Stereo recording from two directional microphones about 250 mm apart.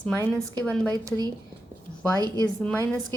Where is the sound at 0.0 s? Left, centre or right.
Centre.